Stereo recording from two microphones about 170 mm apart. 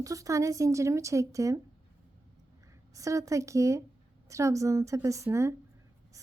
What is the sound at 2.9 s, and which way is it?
A woman's voice, 20° right (ahead or behind).